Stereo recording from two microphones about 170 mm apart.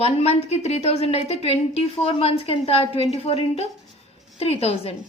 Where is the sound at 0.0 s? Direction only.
40° left (ahead or behind).